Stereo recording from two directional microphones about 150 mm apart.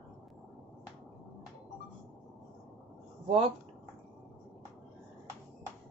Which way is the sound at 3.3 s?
35° right (ahead or behind).